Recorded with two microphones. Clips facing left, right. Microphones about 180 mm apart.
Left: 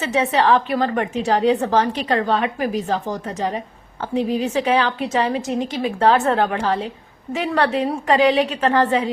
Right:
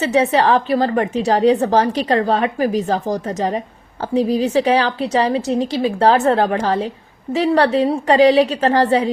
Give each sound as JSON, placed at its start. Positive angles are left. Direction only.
{"t": 0.0, "sound": "a woman's voice", "side_deg": -35}